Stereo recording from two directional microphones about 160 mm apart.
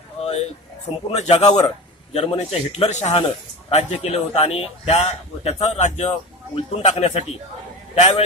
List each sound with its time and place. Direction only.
0.2 s a sound: 40° left (ahead or behind)
1.3 s a man's voice: 25° left (ahead or behind)
2.1 s a man's voice: 40° left (ahead or behind)